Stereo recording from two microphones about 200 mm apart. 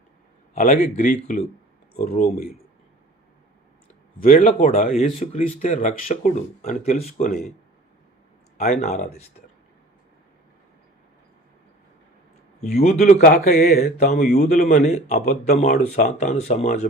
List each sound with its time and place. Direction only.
0.5 s speech: 40° left (ahead or behind)
4.2 s speech: 45° left (ahead or behind)
8.5 s speech: 35° left (ahead or behind)
12.6 s speech: 35° left (ahead or behind)